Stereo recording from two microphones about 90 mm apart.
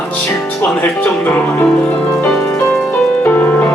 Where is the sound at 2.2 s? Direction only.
20° left (ahead or behind).